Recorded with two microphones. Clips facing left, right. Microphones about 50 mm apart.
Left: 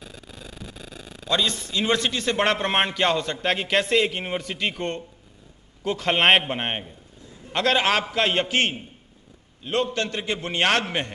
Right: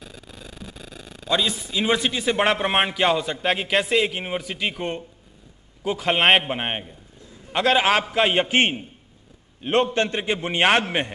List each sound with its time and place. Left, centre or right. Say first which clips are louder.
0.0 s a man's voice: even; centre